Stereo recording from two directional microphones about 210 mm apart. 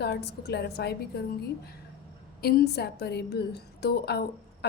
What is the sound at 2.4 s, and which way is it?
A woman's voice, 50° left (ahead or behind).